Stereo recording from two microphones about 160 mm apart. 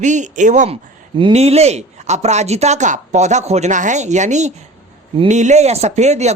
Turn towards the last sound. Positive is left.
turn(degrees=-45)  # may be behind; listen again after turning